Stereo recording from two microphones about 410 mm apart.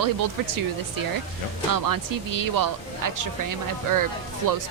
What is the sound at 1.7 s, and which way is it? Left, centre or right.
Speech, right.